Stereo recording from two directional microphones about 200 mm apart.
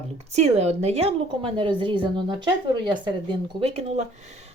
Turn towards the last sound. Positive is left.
turn(degrees=-35)  # may be behind; listen again after turning